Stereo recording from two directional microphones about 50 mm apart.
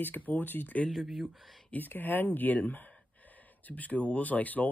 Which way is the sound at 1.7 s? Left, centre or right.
Left.